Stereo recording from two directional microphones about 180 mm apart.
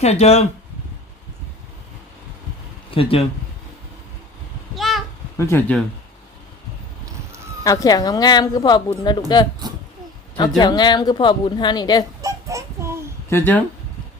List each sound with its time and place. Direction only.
0.0 s speech: 35° left (ahead or behind)
2.9 s speech: 30° left (ahead or behind)
4.7 s a sound: centre (ahead or behind)
5.4 s speech: 10° left (ahead or behind)
7.6 s speech: 20° left (ahead or behind)
10.6 s speech: 25° left (ahead or behind)
12.2 s child singing: 15° right (ahead or behind)
13.3 s speech: 10° left (ahead or behind)